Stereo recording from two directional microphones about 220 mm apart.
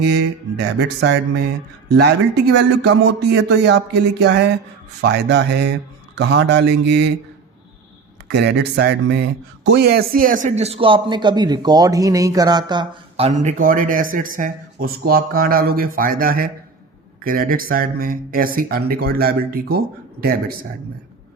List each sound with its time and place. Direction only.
0.0 s a man's voice: 50° right (ahead or behind)
8.3 s a man's voice: 50° right (ahead or behind)